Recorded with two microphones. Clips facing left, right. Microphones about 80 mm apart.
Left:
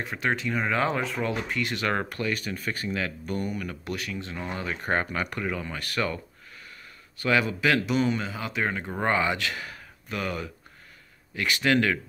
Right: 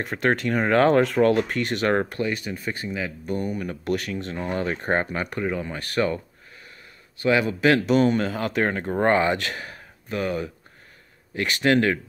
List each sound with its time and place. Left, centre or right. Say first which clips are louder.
0.0 s speech: right 5 dB; right; by 3.1 s centre
3.3 s speech: right 4 dB; right
3.9 s a man's voice: right 8 dB; right
7.4 s speech: right 5 dB; right